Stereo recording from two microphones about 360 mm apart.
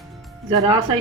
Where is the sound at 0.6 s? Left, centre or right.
Centre.